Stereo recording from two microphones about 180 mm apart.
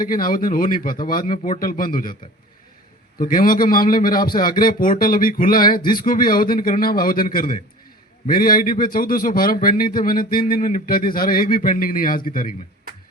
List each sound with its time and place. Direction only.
0.0 s a man's voice: 50° left (ahead or behind)
3.2 s a man's voice: 50° left (ahead or behind)